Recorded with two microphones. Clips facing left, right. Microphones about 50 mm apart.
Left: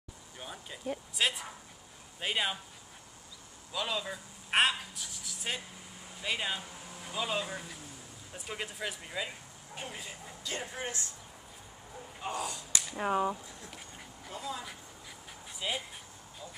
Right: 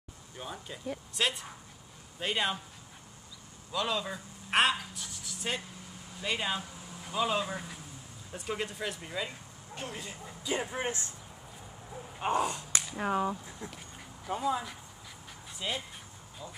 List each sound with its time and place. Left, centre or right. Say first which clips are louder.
0.4 s speech: right 3 dB; centre
3.7 s speech: right 3 dB; centre
10.4 s speech: right 6 dB; centre
10.7 s speech: right 4 dB; right
12.2 s speech: right 7 dB; right
12.9 s speech: left 1 dB; centre
13.7 s duck: right 1 dB; centre
14.3 s speech: right 9 dB; right
15.6 s speech: even; centre